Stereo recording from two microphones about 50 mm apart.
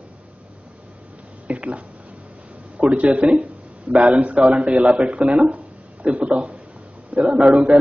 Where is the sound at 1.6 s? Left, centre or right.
Right.